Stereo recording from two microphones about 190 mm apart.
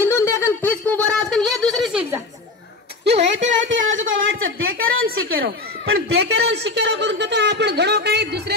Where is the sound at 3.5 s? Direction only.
80° right.